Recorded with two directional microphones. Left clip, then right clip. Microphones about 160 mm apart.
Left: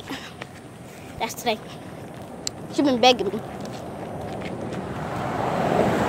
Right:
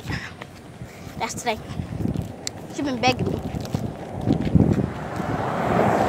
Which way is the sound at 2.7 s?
50° left (ahead or behind).